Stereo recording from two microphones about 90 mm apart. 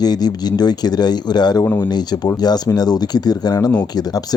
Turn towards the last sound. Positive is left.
turn(degrees=45)  # may be behind; listen again after turning